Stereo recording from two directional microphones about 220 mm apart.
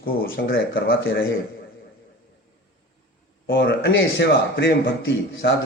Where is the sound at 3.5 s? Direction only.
45° left (ahead or behind).